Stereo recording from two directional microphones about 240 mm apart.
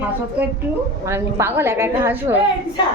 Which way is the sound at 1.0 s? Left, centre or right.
Centre.